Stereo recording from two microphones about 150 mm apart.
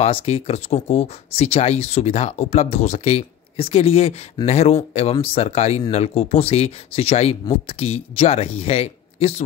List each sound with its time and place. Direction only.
0.0 s speech: 40° left (ahead or behind)